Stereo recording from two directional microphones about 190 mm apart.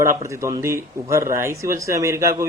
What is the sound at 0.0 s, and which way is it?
Speech, 15° right (ahead or behind).